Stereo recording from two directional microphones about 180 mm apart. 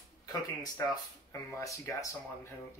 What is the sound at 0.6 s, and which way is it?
Speech, 20° left (ahead or behind).